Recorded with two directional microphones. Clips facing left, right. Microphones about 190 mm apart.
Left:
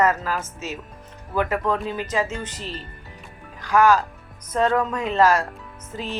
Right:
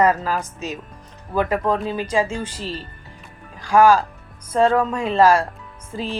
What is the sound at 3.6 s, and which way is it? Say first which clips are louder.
Speech: right 3 dB; 30° right (ahead or behind).